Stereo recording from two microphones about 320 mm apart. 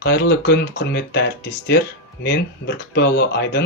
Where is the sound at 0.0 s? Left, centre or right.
Left.